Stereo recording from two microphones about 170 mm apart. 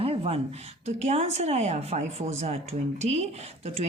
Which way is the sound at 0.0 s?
35° right (ahead or behind).